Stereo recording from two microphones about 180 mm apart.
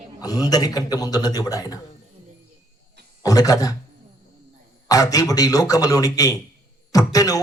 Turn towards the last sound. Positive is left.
turn(degrees=20)  # may be behind; listen again after turning